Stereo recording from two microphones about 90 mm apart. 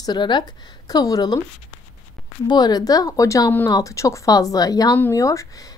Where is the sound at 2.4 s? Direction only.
50° left (ahead or behind).